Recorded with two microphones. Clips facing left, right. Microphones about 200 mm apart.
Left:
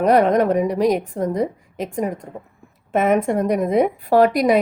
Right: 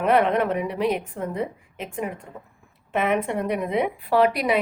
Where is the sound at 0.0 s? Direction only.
40° left (ahead or behind).